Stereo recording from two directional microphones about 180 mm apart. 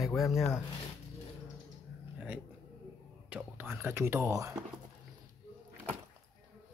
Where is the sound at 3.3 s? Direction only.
10° right (ahead or behind).